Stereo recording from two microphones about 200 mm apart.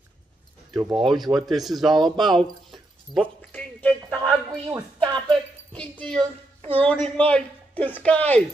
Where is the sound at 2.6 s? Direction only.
Centre (ahead or behind).